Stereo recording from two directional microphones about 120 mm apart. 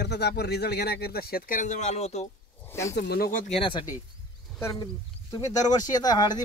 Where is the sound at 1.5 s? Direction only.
85° left; by 2.3 s 65° left (ahead or behind).